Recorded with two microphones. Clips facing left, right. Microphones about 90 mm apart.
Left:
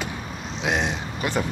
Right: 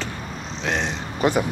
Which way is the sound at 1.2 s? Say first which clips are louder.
Right 7 dB; 30° right (ahead or behind).